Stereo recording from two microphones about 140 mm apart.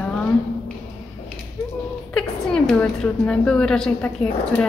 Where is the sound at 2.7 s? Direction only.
5° left (ahead or behind).